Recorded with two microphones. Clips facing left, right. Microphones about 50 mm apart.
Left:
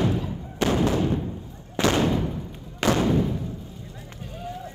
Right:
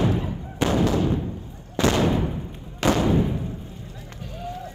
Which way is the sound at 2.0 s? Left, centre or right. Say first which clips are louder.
Right 1 dB; right.